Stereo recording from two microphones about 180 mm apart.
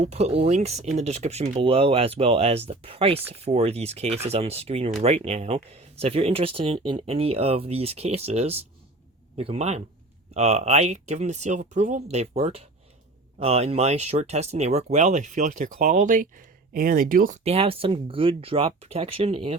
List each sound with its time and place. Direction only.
0.0 s speech: 35° right (ahead or behind)